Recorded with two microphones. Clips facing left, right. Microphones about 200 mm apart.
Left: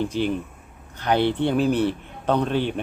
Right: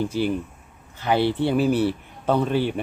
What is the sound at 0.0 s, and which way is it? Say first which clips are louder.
A man's voice: even; 10° right (ahead or behind).